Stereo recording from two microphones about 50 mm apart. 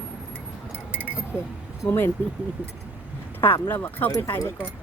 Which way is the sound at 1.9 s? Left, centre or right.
Left.